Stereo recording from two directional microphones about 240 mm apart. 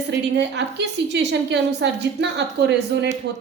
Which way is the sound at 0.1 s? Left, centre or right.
Right.